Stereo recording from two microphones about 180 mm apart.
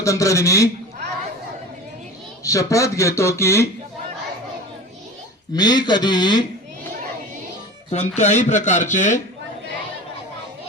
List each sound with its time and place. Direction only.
0.0 s speech: 15° left (ahead or behind)
2.4 s speech: 15° left (ahead or behind)
5.5 s speech: 25° left (ahead or behind)
7.9 s speech: 35° left (ahead or behind)